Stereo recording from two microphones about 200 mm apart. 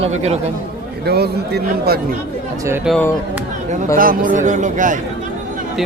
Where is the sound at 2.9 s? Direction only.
5° left (ahead or behind).